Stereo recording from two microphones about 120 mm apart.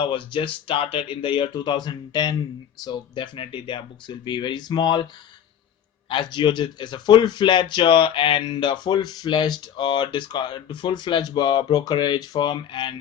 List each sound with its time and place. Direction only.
0.0 s speech: 45° left (ahead or behind)
6.1 s speech: 40° left (ahead or behind)